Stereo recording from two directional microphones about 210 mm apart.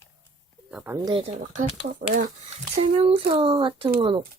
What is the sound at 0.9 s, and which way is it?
Speech, 20° right (ahead or behind).